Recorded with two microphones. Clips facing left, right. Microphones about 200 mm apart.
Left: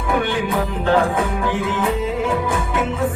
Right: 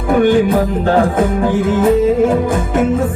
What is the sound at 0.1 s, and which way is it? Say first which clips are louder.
Music: right 10 dB; 45° right (ahead or behind).